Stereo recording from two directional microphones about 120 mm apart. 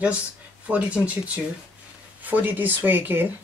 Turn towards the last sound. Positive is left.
turn(degrees=-15)  # may be behind; listen again after turning